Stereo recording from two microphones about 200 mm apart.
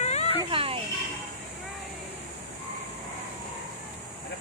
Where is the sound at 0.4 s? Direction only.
25° right (ahead or behind).